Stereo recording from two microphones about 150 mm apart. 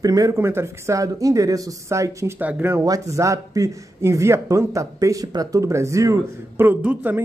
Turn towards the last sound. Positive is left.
turn(degrees=-15)  # may be behind; listen again after turning